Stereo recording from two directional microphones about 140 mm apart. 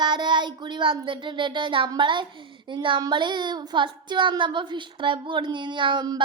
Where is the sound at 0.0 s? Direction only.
30° right (ahead or behind).